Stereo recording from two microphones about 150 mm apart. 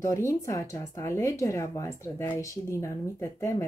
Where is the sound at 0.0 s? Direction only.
20° left (ahead or behind).